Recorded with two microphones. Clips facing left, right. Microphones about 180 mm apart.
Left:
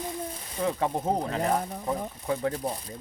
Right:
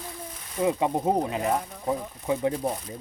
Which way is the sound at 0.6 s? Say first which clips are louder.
Right 3 dB; 15° right (ahead or behind).